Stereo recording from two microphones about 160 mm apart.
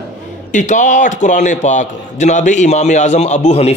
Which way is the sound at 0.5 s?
50° left (ahead or behind).